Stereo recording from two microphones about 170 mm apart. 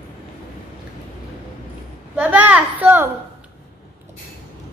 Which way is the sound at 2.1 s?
10° right (ahead or behind).